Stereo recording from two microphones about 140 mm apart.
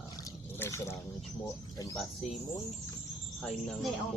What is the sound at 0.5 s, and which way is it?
Speech, 20° left (ahead or behind).